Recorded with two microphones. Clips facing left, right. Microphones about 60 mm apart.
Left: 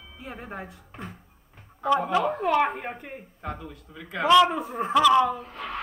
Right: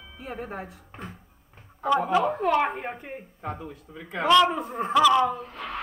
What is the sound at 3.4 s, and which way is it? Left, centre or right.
Speech, right.